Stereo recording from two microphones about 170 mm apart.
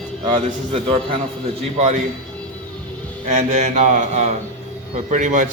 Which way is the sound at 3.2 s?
40° right (ahead or behind).